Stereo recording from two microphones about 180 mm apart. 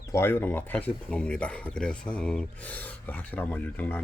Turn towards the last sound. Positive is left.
turn(degrees=10)  # may be behind; listen again after turning